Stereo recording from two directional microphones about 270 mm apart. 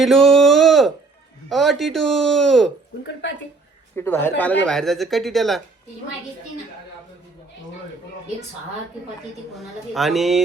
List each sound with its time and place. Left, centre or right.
0.0 s speech: centre
3.0 s a woman's voice: left
3.9 s speech: centre
9.6 s speech: centre